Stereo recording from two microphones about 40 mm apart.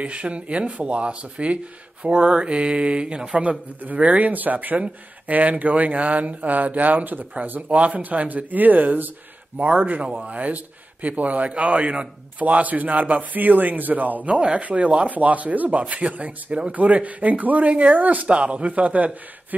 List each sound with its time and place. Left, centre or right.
0.0 s speech: right
3.8 s speech: right
7.6 s speech: right
14.3 s speech: right
15.0 s speech: right
18.3 s speech: right